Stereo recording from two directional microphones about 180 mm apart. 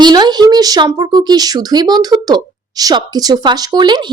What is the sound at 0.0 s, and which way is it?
Speech, 25° right (ahead or behind).